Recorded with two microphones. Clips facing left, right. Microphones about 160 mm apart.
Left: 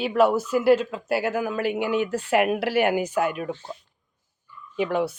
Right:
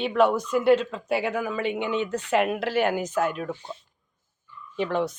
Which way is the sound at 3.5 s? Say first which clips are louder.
Left 2 dB; 15° right (ahead or behind).